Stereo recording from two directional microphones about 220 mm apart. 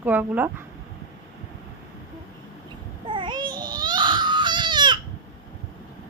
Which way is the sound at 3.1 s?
20° right (ahead or behind).